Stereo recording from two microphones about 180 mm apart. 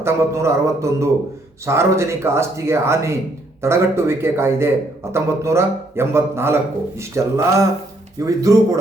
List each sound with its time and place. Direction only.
0.0 s speech: 15° right (ahead or behind)